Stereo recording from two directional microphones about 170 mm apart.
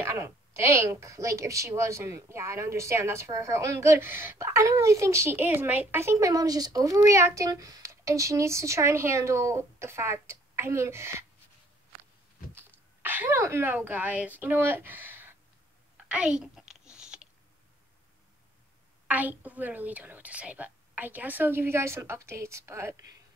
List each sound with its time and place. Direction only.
0.0 s a woman's voice: 15° right (ahead or behind)
12.5 s a child's voice: 10° right (ahead or behind)
16.9 s a sound: 5° right (ahead or behind)
19.0 s a woman's voice: 10° right (ahead or behind)